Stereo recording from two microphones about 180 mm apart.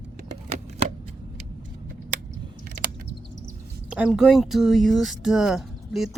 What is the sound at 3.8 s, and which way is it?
Speech, 5° right (ahead or behind).